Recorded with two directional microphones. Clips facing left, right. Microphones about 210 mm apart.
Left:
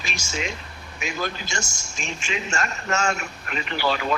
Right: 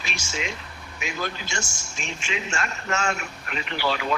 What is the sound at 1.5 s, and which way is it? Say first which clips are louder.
A man's voice: left 1 dB; 40° left (ahead or behind).